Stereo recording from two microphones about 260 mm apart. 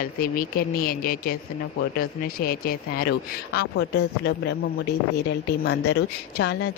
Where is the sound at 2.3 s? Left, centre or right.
Left.